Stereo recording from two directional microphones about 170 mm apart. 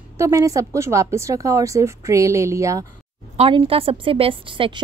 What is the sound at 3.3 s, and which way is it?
A woman's voice, 35° right (ahead or behind).